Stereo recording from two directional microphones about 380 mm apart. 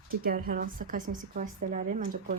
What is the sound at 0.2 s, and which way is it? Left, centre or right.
A woman's voice, right.